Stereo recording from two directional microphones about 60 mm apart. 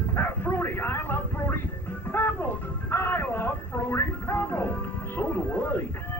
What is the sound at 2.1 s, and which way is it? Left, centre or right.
Music, left.